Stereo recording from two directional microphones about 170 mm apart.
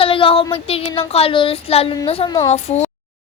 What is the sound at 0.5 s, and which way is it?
Speech, 35° left (ahead or behind).